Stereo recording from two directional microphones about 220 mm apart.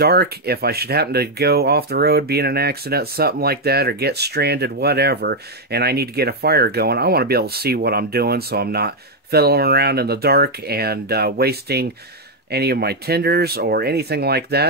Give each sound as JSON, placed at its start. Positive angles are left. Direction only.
{"t": 0.0, "sound": "speech", "side_deg": -45}